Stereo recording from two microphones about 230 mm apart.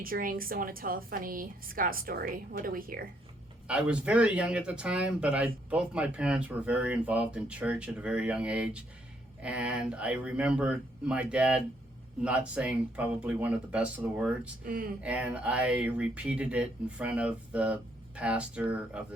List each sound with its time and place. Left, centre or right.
0.0 s a woman's voice: right
3.7 s speech: centre
14.6 s a woman's voice: right
15.0 s speech: centre